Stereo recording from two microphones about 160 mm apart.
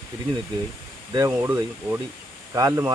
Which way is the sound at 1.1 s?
20° right (ahead or behind).